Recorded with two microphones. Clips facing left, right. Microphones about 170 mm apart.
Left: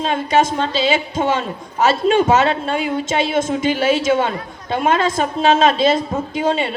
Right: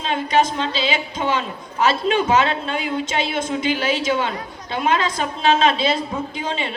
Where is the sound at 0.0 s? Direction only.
45° left (ahead or behind).